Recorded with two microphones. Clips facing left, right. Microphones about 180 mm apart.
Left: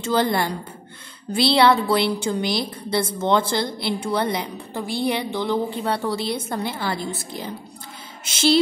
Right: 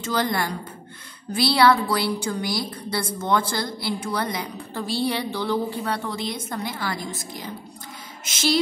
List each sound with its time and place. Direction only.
0.0 s a woman's voice: 25° left (ahead or behind)
4.7 s a woman's voice: 15° left (ahead or behind)
5.9 s a woman's voice: 35° left (ahead or behind)